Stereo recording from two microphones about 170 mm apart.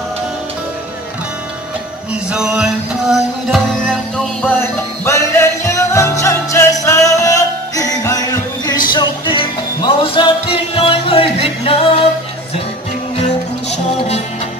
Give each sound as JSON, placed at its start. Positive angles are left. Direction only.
{"t": 2.3, "sound": "music", "side_deg": -5}
{"t": 5.0, "sound": "music", "side_deg": 15}
{"t": 13.2, "sound": "music", "side_deg": 40}